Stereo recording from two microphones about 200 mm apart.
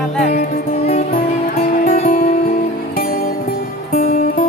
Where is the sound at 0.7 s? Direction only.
30° left (ahead or behind).